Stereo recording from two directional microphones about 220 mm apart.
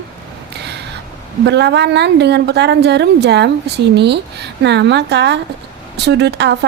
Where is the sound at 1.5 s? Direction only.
50° right (ahead or behind).